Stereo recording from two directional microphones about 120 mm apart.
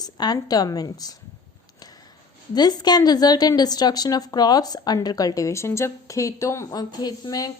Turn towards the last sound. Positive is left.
turn(degrees=35)  # may be behind; listen again after turning